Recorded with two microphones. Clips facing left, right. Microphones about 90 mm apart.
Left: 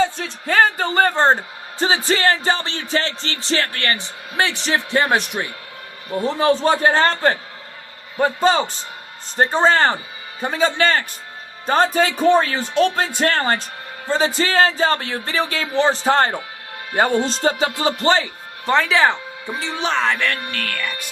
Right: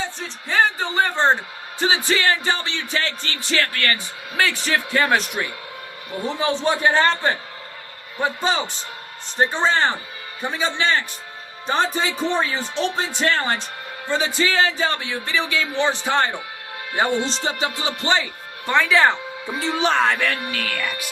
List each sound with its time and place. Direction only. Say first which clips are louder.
0.4 s speech: left 3 dB; 55° left (ahead or behind); by 5.4 s 20° left (ahead or behind)
6.2 s speech: left 5 dB; 40° left (ahead or behind)
17.4 s speech: left 5 dB; 40° left (ahead or behind)
18.6 s speech: left 1 dB; 25° left (ahead or behind)
19.5 s speech: right 2 dB; centre (ahead or behind)